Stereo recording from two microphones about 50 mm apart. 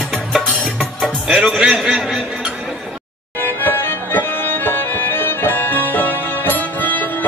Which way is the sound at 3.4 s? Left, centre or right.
Left.